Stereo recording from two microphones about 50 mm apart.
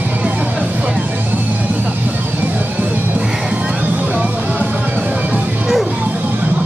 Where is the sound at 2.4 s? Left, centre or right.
Right.